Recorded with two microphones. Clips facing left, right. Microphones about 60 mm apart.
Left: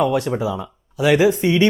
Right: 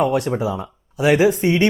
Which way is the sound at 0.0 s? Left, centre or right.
Right.